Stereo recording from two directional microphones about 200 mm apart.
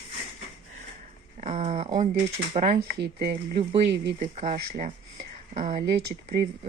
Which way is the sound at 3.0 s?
50° right (ahead or behind).